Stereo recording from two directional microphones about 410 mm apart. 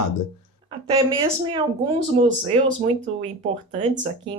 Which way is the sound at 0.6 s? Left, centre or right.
Centre.